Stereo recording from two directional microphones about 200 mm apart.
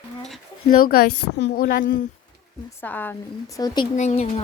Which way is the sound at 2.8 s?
10° left (ahead or behind).